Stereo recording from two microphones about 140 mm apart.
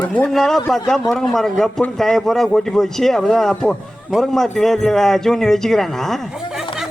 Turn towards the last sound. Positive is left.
turn(degrees=0)  # may be behind; listen again after turning